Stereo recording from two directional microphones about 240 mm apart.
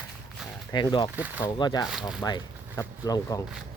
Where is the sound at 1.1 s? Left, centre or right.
Centre.